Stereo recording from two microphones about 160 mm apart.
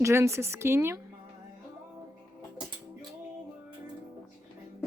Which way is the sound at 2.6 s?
30° right (ahead or behind).